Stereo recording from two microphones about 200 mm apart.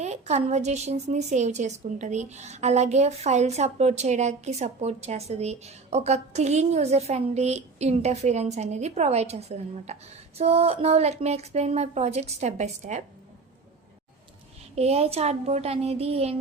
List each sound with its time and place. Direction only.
0.0 s a woman's voice: 35° right (ahead or behind)
14.8 s a woman's voice: 30° right (ahead or behind)